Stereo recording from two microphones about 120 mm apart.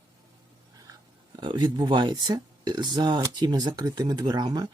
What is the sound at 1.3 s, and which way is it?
Speech, 40° right (ahead or behind).